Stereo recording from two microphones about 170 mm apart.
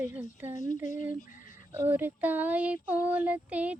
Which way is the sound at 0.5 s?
45° left (ahead or behind).